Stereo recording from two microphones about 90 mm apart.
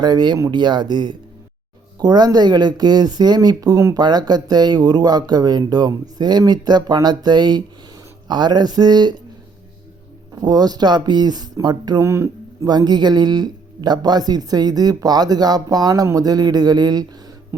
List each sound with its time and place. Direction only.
0.0 s speech: 50° right (ahead or behind)
10.3 s speech: 45° right (ahead or behind)
12.0 s speech: 30° right (ahead or behind)
12.6 s speech: 50° right (ahead or behind)
17.5 s music: 25° right (ahead or behind)